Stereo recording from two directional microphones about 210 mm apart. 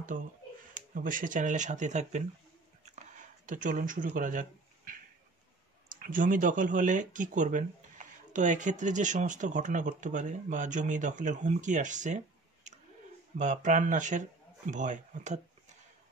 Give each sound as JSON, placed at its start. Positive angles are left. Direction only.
{"t": 0.7, "sound": "speech", "side_deg": -40}
{"t": 2.8, "sound": "a sound", "side_deg": -35}
{"t": 5.9, "sound": "speech", "side_deg": -40}
{"t": 12.7, "sound": "clicking", "side_deg": -35}
{"t": 13.4, "sound": "speech", "side_deg": -35}